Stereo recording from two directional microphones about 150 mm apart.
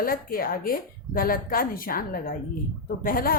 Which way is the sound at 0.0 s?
75° left (ahead or behind).